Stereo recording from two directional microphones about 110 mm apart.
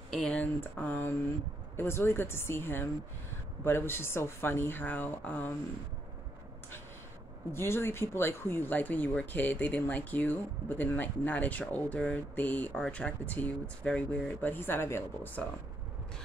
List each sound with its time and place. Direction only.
0.1 s speech: 5° left (ahead or behind)
0.6 s speech: 20° left (ahead or behind)
7.5 s speech: 20° left (ahead or behind)